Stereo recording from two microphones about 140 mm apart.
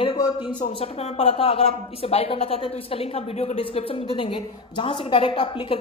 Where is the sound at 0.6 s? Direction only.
45° left (ahead or behind).